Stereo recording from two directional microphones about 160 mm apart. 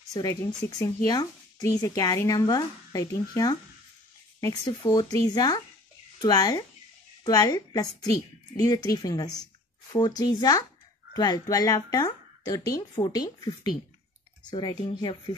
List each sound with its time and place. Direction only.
0.1 s speech: 25° left (ahead or behind)